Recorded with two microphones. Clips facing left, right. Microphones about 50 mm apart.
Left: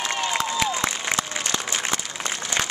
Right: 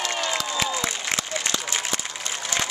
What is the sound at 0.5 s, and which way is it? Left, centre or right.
Applause, centre.